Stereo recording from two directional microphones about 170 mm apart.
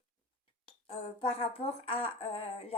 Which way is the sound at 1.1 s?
35° left (ahead or behind).